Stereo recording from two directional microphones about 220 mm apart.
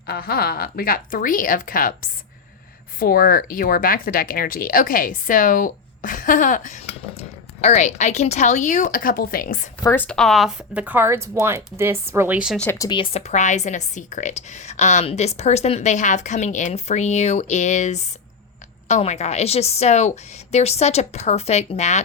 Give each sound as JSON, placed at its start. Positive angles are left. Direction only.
{"t": 0.1, "sound": "speech", "side_deg": 45}
{"t": 3.0, "sound": "speech", "side_deg": 40}
{"t": 9.8, "sound": "speech", "side_deg": 10}
{"t": 12.8, "sound": "a woman's voice", "side_deg": 20}